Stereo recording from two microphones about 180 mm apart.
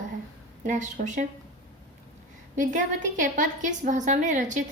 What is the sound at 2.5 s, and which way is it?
A woman's voice, 45° right (ahead or behind).